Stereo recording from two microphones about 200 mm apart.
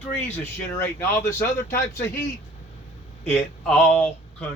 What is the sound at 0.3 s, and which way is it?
Speech, 10° left (ahead or behind).